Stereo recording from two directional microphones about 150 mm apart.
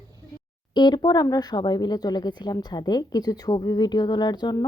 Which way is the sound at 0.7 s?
30° left (ahead or behind).